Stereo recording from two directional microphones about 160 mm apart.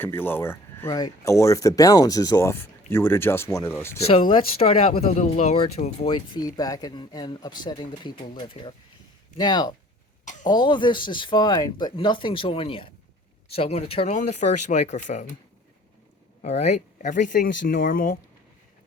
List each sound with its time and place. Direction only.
0.0 s speech: 15° left (ahead or behind)
4.0 s speech: 35° left (ahead or behind)
6.1 s speech: 25° left (ahead or behind); by 15.3 s 50° left (ahead or behind)
16.4 s speech: 45° left (ahead or behind)